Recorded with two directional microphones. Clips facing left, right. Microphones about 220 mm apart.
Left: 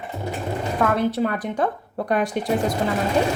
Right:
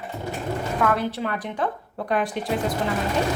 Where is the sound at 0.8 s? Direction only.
40° left (ahead or behind).